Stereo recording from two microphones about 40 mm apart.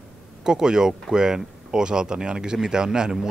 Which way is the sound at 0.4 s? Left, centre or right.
Centre.